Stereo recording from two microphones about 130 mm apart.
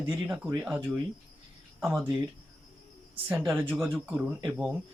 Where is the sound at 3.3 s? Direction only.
15° right (ahead or behind).